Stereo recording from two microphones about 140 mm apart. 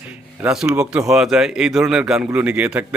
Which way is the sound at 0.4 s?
5° right (ahead or behind).